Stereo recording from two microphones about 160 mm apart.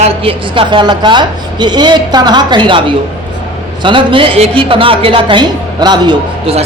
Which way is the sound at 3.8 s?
30° right (ahead or behind).